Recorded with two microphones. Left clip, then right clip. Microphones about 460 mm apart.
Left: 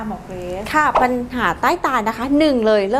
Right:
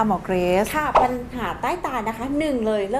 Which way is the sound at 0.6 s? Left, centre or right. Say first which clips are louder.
Left 3 dB; left.